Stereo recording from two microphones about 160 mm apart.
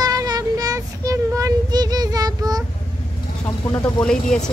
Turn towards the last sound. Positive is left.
turn(degrees=5)  # may be behind; listen again after turning